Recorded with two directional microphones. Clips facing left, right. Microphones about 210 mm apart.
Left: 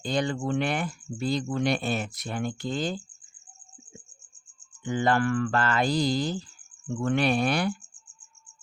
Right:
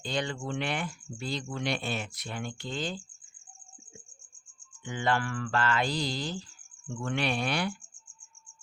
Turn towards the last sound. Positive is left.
turn(degrees=45)  # may be behind; listen again after turning